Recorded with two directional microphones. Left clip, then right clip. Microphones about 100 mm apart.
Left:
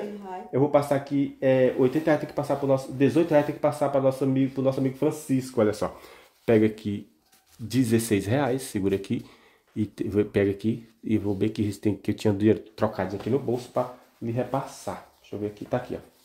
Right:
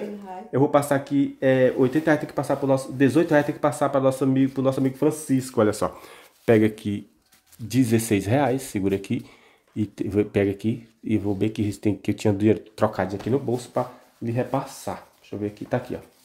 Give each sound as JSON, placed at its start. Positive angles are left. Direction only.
{"t": 0.5, "sound": "speech", "side_deg": -40}
{"t": 12.8, "sound": "speech", "side_deg": -25}